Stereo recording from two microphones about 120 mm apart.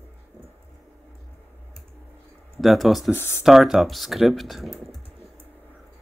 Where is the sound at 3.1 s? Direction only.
20° left (ahead or behind).